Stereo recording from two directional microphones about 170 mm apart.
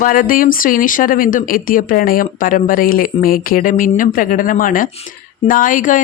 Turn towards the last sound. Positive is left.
turn(degrees=50)  # may be behind; listen again after turning